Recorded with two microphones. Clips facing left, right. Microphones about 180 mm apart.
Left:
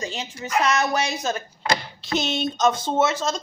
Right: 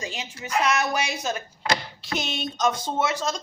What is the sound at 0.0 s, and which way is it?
Speech, 10° right (ahead or behind).